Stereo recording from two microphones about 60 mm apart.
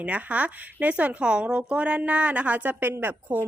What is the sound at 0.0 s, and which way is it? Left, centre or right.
A woman's voice, right.